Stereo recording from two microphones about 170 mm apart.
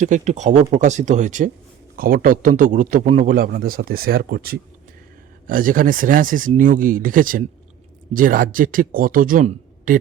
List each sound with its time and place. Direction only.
0.0 s speech: 45° right (ahead or behind)
2.0 s speech: 60° right (ahead or behind)